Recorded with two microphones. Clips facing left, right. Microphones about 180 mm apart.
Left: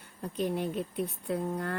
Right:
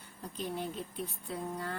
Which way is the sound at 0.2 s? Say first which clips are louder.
Left 7 dB; 55° left (ahead or behind).